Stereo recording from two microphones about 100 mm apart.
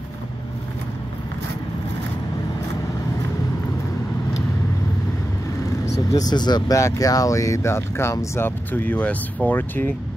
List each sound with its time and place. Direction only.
6.1 s speech: 45° left (ahead or behind); by 9.9 s 20° left (ahead or behind)